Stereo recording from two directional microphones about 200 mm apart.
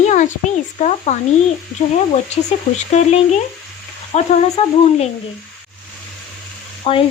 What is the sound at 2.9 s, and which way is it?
Speech, 35° left (ahead or behind).